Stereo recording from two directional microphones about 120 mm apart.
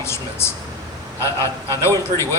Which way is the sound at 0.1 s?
20° left (ahead or behind).